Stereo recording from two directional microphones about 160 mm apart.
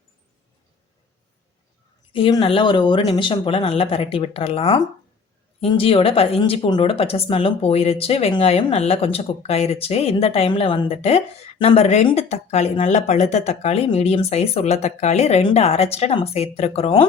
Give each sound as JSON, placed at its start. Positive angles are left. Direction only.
{"t": 2.1, "sound": "a woman's voice", "side_deg": 30}